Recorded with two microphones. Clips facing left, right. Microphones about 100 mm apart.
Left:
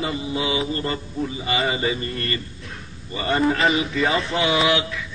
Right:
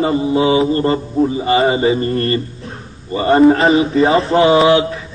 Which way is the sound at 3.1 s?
35° right (ahead or behind).